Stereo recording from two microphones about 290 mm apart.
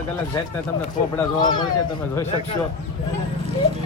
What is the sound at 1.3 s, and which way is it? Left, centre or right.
Speech, centre.